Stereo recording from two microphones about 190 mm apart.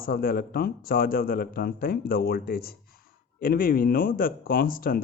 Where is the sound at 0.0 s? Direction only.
50° left (ahead or behind).